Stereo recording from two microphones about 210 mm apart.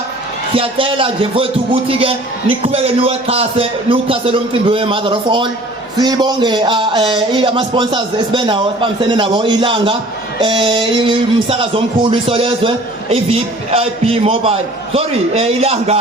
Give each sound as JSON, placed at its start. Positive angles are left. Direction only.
{"t": 0.5, "sound": "a man's voice", "side_deg": -25}